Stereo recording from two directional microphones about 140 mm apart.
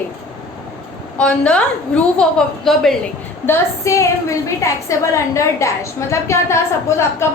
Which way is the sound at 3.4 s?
20° left (ahead or behind).